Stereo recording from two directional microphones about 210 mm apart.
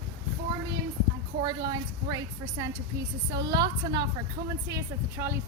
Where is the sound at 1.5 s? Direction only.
20° right (ahead or behind).